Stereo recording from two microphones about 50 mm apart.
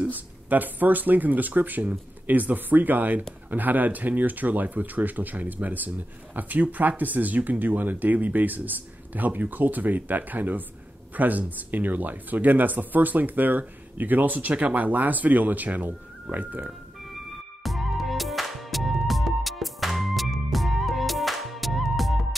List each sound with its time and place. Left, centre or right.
0.0 s speech: right
17.6 s music: centre